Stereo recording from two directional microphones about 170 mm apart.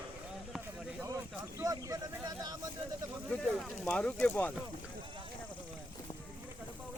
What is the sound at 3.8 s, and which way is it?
Speech, 5° left (ahead or behind).